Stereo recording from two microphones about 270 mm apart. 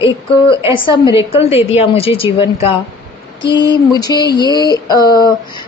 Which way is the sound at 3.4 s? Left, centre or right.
Centre.